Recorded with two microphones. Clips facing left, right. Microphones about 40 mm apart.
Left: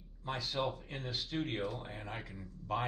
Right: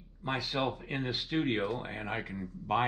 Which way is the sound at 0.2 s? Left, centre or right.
Right.